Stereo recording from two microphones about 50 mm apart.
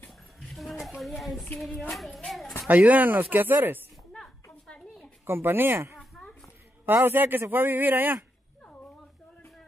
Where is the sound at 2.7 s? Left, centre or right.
Right.